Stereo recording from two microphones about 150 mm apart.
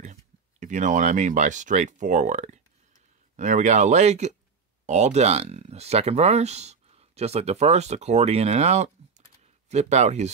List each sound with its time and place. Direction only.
0.0 s speech: 55° right (ahead or behind)